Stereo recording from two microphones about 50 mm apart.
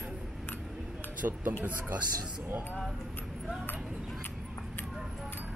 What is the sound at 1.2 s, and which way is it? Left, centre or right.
Speech, right.